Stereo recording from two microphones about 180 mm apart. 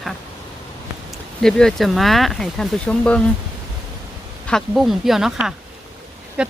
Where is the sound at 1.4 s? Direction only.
5° left (ahead or behind).